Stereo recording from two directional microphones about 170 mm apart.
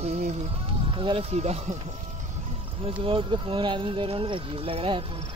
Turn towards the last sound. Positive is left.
turn(degrees=-35)  # may be behind; listen again after turning